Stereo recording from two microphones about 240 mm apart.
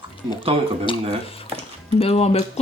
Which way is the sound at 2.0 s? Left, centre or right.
Left.